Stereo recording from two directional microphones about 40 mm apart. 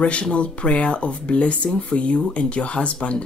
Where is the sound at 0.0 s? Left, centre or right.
Left.